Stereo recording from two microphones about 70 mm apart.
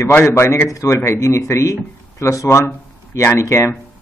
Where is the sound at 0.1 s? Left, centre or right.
Left.